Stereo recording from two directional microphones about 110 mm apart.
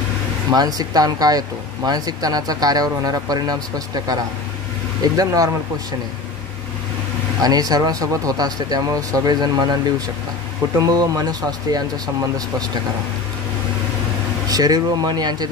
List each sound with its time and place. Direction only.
0.5 s speech: 35° right (ahead or behind)
7.4 s speech: 35° right (ahead or behind)
14.5 s speech: 35° right (ahead or behind)